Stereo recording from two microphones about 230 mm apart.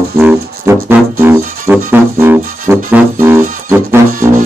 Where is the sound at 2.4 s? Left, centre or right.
Right.